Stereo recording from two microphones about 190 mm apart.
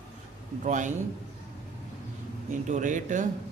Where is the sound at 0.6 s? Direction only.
40° right (ahead or behind).